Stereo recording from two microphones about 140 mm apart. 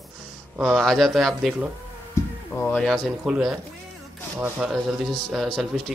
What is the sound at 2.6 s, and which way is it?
Speech, 10° left (ahead or behind).